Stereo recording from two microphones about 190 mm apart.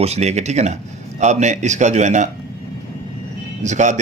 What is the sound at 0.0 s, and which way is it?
A man's voice, 35° right (ahead or behind).